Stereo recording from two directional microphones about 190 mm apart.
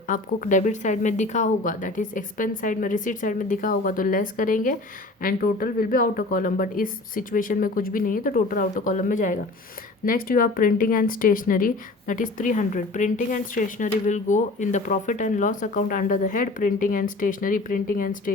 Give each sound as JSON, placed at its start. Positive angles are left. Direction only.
{"t": 0.1, "sound": "speech", "side_deg": 45}